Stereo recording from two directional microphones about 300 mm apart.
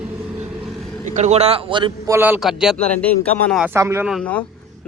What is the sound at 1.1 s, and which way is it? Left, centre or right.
Speech, right.